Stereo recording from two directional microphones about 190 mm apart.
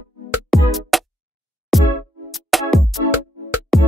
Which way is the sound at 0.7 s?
Centre (ahead or behind).